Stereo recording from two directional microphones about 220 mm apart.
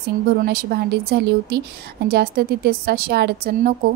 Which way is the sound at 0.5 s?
45° right (ahead or behind).